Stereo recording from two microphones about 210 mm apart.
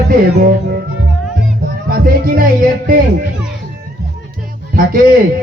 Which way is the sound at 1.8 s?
45° right (ahead or behind).